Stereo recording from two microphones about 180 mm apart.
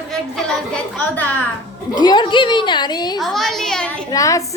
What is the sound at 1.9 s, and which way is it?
A woman's voice, 25° left (ahead or behind).